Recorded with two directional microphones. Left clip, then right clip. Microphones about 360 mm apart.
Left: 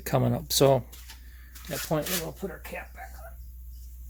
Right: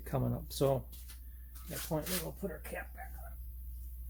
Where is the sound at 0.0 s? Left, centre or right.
Left.